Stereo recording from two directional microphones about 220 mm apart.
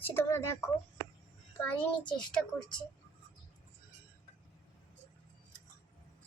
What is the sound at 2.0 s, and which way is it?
Speech, 20° left (ahead or behind).